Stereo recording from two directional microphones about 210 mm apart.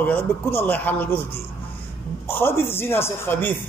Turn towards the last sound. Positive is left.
turn(degrees=10)  # may be behind; listen again after turning